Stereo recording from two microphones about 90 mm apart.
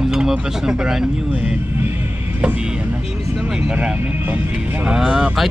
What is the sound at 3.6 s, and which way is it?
Speech, 10° right (ahead or behind).